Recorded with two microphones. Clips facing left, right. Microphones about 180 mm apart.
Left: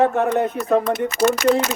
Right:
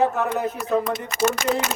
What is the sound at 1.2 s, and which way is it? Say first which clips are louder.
Speech: left 4 dB; 60° left (ahead or behind).